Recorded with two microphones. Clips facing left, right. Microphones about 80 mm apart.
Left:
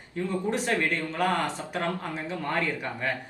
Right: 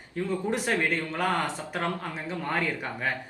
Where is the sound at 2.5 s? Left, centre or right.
Centre.